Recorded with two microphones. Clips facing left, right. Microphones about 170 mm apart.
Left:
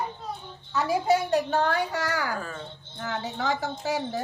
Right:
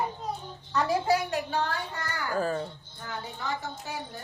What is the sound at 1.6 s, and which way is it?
Speech, 65° left (ahead or behind).